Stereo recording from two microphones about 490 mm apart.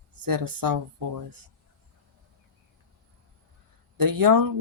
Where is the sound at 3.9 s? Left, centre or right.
Right.